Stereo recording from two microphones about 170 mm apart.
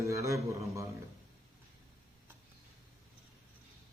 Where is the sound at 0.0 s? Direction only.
20° right (ahead or behind).